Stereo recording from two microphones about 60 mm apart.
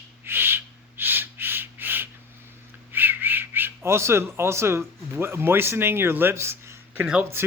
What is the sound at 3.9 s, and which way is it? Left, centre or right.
A man's voice, right.